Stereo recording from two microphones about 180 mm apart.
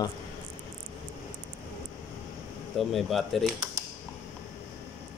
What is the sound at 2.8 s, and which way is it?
Typewriter, centre (ahead or behind).